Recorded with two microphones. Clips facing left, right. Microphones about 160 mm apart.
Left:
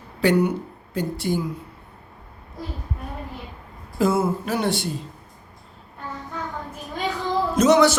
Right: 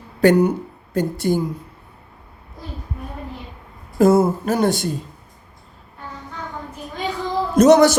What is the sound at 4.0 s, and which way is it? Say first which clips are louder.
Speech: right 6 dB; 40° right (ahead or behind).